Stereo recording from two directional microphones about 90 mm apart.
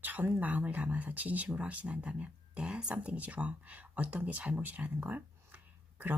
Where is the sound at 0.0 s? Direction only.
20° right (ahead or behind).